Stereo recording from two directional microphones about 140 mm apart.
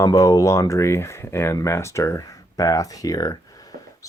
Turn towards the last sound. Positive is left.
turn(degrees=25)  # may be behind; listen again after turning